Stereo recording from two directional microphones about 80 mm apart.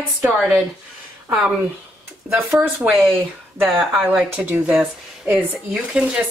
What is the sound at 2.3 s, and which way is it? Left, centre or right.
Speech, right.